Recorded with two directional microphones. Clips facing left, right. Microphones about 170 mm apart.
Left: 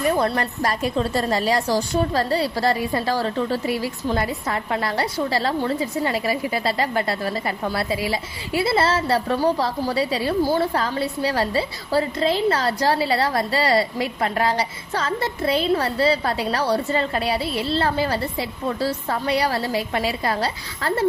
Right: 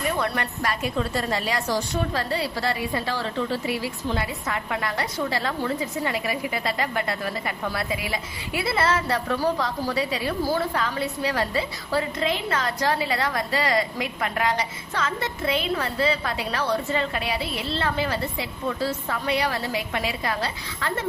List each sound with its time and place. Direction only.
0.1 s a woman's voice: 35° left (ahead or behind)